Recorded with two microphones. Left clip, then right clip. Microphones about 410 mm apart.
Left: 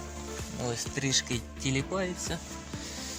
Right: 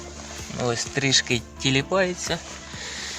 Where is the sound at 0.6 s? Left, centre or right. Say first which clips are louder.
Right 9 dB; right.